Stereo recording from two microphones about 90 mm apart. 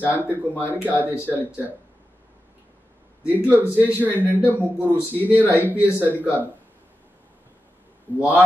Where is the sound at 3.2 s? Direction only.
20° right (ahead or behind).